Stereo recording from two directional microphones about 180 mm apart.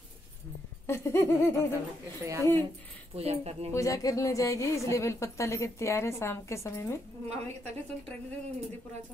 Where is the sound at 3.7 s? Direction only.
20° left (ahead or behind).